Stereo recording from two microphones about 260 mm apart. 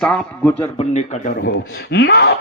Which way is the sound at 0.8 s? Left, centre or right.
Left.